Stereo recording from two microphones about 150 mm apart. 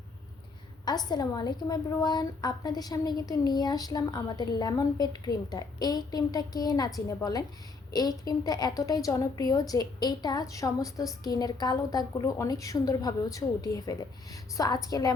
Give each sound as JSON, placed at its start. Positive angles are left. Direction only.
{"t": 0.9, "sound": "a woman's voice", "side_deg": 25}